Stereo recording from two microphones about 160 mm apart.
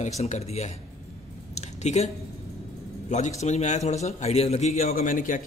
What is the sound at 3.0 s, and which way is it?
A man's voice, 50° left (ahead or behind).